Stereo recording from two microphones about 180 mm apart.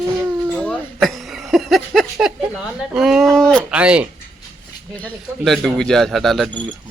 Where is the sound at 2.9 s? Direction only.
5° right (ahead or behind).